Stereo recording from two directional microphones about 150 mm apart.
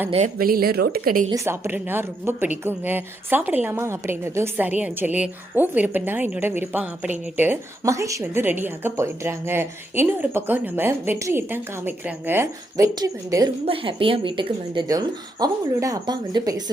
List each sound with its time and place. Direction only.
0.3 s speech: 75° right (ahead or behind)
1.5 s a woman's voice: 15° right (ahead or behind)